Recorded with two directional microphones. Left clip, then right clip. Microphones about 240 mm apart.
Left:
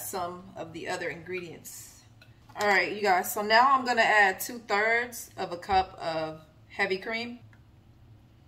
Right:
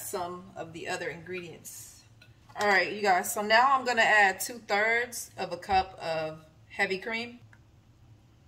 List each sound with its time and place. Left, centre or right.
0.0 s a woman's voice: centre